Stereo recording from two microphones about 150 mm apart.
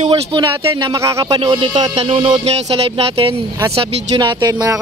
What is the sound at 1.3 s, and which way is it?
Music, 35° right (ahead or behind).